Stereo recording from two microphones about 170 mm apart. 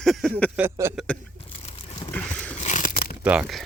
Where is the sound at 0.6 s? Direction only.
15° right (ahead or behind).